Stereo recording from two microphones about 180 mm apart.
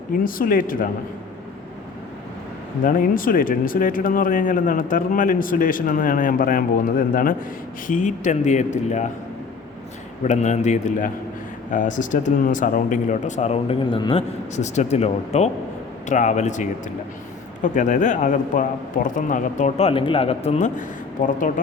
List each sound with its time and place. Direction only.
0.3 s speech: 50° left (ahead or behind)
2.8 s speech: 50° left (ahead or behind)
10.2 s speech: 40° left (ahead or behind)